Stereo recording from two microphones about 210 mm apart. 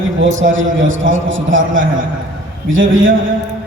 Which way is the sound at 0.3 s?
65° right (ahead or behind).